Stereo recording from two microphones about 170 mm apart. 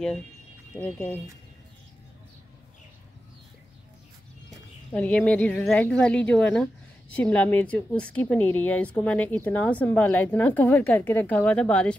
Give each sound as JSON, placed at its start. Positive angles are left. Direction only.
{"t": 0.7, "sound": "a woman's voice", "side_deg": 5}
{"t": 4.9, "sound": "a woman's voice", "side_deg": 5}